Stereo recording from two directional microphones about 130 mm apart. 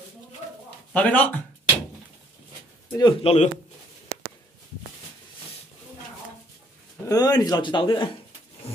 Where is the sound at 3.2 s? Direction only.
50° left (ahead or behind).